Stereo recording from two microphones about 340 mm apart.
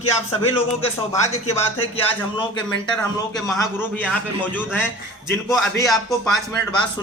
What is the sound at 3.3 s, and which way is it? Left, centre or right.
Speech, centre.